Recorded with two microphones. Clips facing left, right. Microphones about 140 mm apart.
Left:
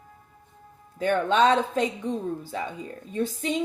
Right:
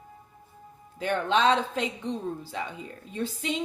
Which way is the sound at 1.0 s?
45° left (ahead or behind).